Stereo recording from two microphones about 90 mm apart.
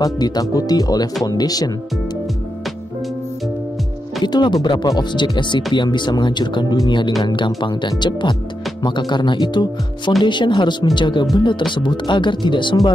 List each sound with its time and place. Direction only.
0.0 s speech: 45° left (ahead or behind)
4.2 s speech: 55° left (ahead or behind)